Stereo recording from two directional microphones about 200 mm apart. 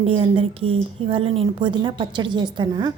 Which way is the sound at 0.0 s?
30° right (ahead or behind).